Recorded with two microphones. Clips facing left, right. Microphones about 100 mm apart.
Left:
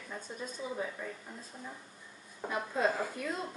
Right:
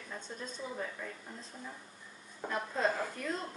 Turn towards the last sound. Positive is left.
turn(degrees=5)  # may be behind; listen again after turning